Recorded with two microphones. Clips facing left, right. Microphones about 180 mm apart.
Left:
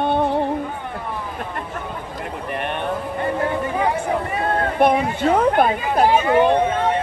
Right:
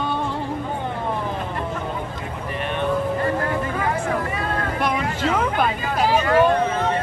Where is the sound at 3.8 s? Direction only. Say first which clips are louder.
Left 2 dB; 25° left (ahead or behind).